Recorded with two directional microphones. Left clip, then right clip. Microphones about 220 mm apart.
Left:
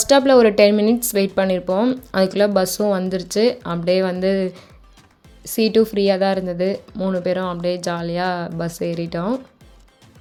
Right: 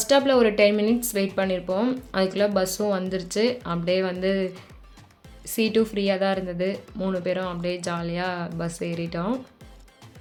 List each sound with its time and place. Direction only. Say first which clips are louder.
0.0 s speech: left 6 dB; 30° left (ahead or behind)